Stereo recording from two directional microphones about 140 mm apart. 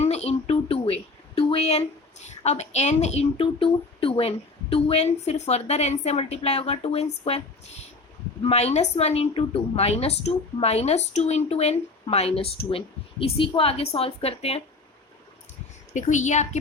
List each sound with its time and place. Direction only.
0.0 s a woman's voice: 50° left (ahead or behind)
15.9 s a woman's voice: 60° left (ahead or behind)